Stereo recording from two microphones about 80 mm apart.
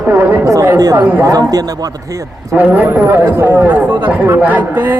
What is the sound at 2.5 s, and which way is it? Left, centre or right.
Speech, right.